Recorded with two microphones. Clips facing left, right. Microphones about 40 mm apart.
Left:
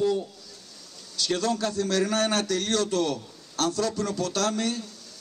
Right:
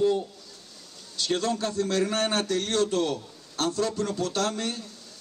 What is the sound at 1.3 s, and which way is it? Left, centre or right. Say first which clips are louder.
A man's voice: left 1 dB; right.